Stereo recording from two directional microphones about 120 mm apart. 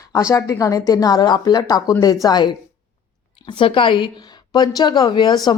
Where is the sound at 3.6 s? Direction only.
45° left (ahead or behind).